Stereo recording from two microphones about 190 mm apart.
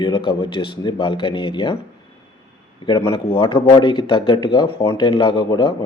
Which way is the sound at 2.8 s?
25° left (ahead or behind).